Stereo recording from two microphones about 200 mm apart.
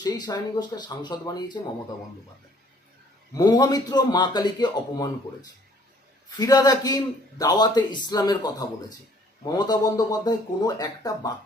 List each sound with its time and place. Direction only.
0.0 s a man's voice: 20° left (ahead or behind)
3.3 s a man's voice: 20° left (ahead or behind)